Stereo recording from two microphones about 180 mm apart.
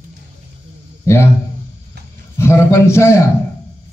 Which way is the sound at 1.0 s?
15° left (ahead or behind).